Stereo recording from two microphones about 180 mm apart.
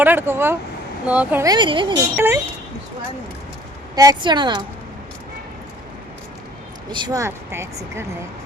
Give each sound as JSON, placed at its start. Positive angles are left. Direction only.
{"t": 0.0, "sound": "speech", "side_deg": -10}
{"t": 1.5, "sound": "speech", "side_deg": -25}
{"t": 2.1, "sound": "speech", "side_deg": -10}
{"t": 3.9, "sound": "speech", "side_deg": -20}
{"t": 6.9, "sound": "speech", "side_deg": -20}